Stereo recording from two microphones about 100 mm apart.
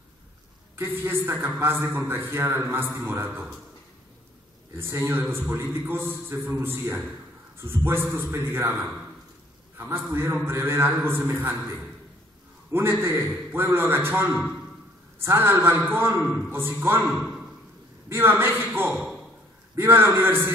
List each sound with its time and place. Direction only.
0.7 s a man's voice: 20° right (ahead or behind)
4.7 s a man's voice: 25° right (ahead or behind)
17.1 s a sound: 5° right (ahead or behind)
18.0 s a man's voice: 25° right (ahead or behind)